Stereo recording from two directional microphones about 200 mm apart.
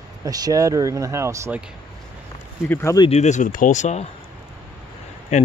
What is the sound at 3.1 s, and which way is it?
Speech, 35° left (ahead or behind).